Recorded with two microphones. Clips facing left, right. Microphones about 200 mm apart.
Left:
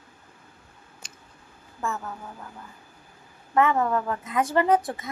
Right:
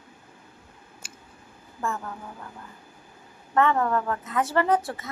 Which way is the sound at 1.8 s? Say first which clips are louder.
Even; 5° left (ahead or behind).